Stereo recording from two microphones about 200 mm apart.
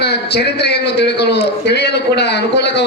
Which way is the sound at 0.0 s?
55° left (ahead or behind).